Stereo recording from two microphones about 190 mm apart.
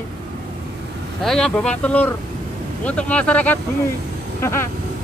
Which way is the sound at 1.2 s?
5° left (ahead or behind).